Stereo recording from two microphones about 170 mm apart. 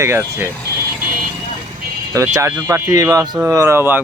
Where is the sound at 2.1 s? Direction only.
15° right (ahead or behind).